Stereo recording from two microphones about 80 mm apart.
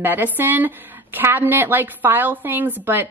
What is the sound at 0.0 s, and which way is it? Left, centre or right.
A woman's voice, right.